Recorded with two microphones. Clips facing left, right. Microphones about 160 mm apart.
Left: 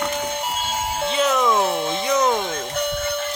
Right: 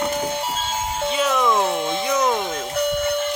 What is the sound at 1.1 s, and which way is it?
Speech, 5° right (ahead or behind).